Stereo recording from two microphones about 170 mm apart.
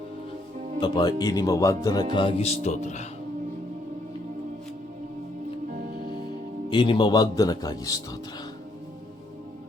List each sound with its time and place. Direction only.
0.8 s a man's voice: 25° left (ahead or behind)
2.1 s speech: 35° left (ahead or behind)
6.7 s a man's voice: 30° left (ahead or behind)